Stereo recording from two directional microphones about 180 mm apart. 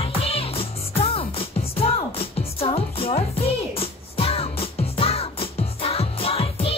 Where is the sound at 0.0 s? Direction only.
30° left (ahead or behind).